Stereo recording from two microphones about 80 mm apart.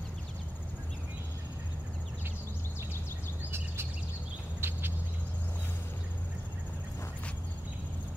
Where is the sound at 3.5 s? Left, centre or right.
Right.